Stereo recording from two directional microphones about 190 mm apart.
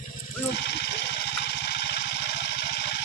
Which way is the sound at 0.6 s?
60° left (ahead or behind).